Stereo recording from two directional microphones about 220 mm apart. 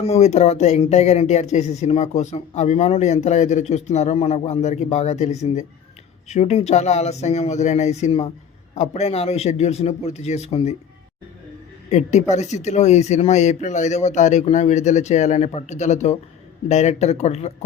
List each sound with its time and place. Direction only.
0.0 s a man's voice: 30° left (ahead or behind)
11.9 s speech: 30° left (ahead or behind)